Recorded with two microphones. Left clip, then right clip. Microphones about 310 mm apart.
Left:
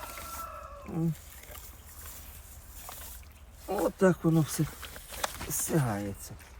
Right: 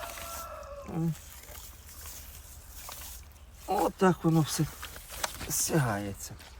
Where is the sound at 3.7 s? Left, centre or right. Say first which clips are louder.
Even; centre.